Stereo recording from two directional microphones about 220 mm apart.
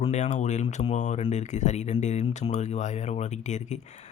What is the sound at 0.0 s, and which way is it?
Speech, 30° left (ahead or behind).